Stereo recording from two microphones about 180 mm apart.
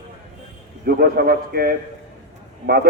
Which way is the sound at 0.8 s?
60° right (ahead or behind).